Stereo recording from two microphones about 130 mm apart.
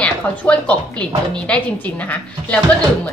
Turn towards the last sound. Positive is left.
turn(degrees=10)  # may be behind; listen again after turning